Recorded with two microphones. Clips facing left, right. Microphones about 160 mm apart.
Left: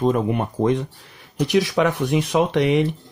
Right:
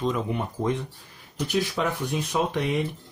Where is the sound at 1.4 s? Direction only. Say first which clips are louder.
Left 8 dB; 85° left.